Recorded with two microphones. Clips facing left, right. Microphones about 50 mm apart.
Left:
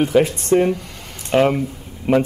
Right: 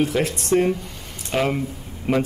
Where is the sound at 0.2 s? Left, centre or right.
Centre.